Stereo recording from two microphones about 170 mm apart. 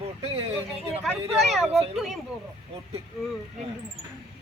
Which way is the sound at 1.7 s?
35° right (ahead or behind).